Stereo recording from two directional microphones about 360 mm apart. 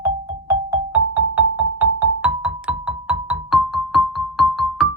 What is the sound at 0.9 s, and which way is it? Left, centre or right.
Music, centre.